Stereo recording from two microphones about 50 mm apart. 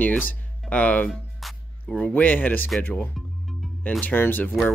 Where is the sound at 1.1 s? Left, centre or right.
Centre.